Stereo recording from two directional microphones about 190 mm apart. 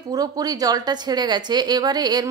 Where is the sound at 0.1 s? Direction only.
20° right (ahead or behind).